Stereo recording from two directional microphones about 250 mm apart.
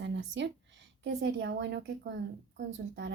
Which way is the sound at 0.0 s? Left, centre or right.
Right.